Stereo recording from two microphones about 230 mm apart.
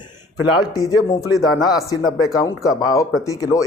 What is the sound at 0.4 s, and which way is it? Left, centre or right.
Speech, centre.